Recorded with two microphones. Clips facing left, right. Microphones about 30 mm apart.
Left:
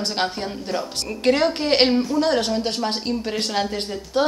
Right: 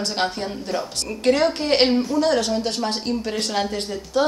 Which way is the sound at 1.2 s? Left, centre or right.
Left.